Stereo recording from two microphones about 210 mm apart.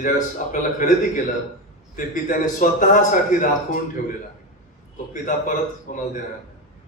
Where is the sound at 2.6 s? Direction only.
40° left (ahead or behind).